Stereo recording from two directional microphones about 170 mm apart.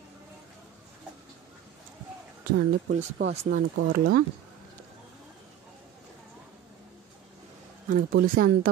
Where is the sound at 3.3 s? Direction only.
45° right (ahead or behind).